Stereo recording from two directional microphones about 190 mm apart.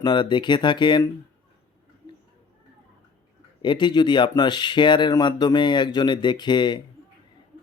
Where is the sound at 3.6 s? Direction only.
25° left (ahead or behind).